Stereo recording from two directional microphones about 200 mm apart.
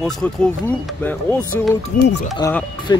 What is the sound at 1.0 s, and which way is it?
Speech, 10° left (ahead or behind).